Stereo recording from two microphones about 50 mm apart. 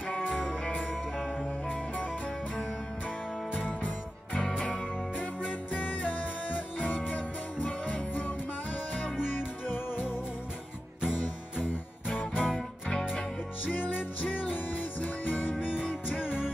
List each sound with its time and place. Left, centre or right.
3.5 s music: left
4.6 s music: centre
5.7 s music: left
12.4 s music: centre
13.7 s music: left
15.7 s music: centre
16.3 s music: left